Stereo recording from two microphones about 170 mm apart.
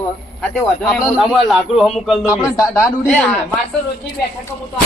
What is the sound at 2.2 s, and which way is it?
Speech, 20° left (ahead or behind).